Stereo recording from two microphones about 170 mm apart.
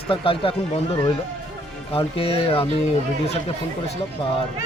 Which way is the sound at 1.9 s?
35° left (ahead or behind).